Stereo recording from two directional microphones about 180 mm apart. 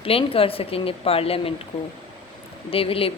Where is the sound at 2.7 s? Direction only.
30° left (ahead or behind).